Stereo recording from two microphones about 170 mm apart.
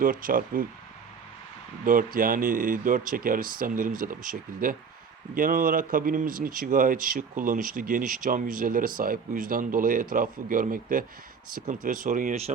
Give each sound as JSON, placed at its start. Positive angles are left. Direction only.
{"t": 0.0, "sound": "speech", "side_deg": -55}
{"t": 1.8, "sound": "speech", "side_deg": -50}